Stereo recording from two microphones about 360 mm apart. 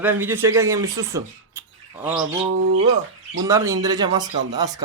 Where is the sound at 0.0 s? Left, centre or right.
Centre.